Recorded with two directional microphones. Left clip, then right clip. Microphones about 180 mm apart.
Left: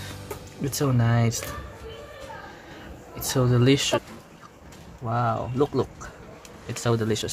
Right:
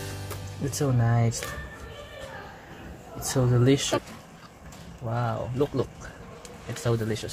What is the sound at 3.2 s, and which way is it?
Speech, 15° left (ahead or behind).